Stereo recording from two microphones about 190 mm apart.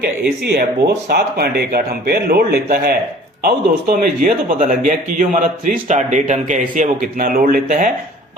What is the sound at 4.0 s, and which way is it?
A man's voice, 45° right (ahead or behind).